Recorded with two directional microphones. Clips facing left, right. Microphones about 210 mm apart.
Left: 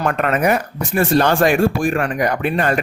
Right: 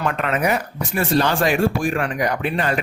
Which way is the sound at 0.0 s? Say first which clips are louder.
Left 4 dB; 50° left (ahead or behind).